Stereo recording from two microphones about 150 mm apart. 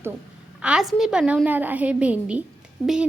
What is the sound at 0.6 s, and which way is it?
A woman's voice, 5° right (ahead or behind).